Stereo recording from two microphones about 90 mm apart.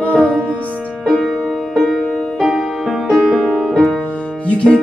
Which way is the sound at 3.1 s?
Centre (ahead or behind).